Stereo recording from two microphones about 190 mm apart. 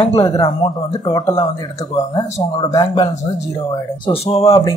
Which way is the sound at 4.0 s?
30° left (ahead or behind).